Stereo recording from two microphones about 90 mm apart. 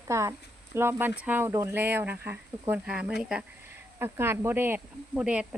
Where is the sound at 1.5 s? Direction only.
30° right (ahead or behind).